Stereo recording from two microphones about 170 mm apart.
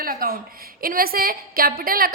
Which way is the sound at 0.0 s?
55° right (ahead or behind).